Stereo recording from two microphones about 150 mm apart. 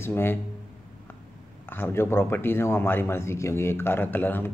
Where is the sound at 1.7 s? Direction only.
15° left (ahead or behind).